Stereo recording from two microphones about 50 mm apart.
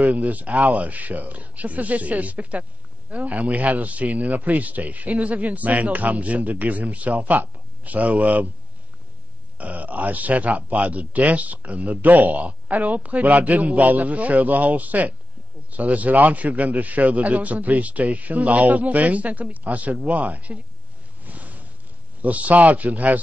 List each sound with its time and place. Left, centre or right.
0.0 s speech: right
9.6 s speech: right
21.2 s a sound: right
22.2 s speech: right